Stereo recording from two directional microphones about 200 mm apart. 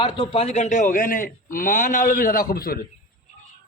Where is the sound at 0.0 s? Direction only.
25° left (ahead or behind); by 2.8 s 50° left (ahead or behind).